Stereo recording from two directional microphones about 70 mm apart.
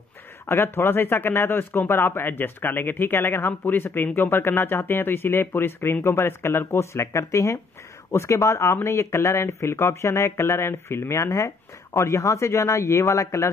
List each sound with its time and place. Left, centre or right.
0.5 s speech: left